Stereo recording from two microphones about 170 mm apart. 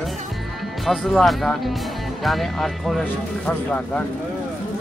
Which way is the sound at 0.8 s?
Centre (ahead or behind).